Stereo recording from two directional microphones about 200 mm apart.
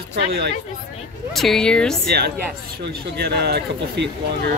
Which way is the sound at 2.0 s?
55° right (ahead or behind).